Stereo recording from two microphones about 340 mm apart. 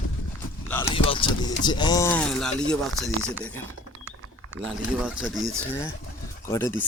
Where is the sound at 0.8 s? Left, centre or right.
Centre.